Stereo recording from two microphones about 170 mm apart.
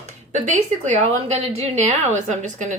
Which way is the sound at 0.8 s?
40° right (ahead or behind).